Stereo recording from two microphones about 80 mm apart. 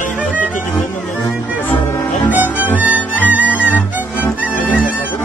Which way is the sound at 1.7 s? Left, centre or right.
Left.